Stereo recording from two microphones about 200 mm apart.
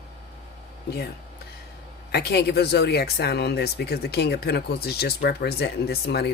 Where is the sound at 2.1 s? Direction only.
55° left (ahead or behind).